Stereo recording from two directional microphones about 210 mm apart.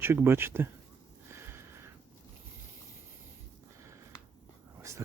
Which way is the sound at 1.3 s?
10° right (ahead or behind).